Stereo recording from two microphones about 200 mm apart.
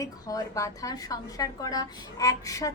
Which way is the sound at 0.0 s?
15° left (ahead or behind).